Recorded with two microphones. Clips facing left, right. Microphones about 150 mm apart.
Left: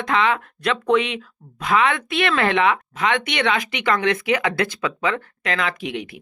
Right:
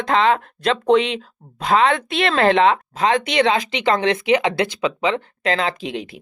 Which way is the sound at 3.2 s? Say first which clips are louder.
Right 4 dB; 25° right (ahead or behind).